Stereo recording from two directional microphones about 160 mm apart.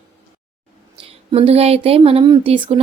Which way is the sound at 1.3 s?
40° right (ahead or behind).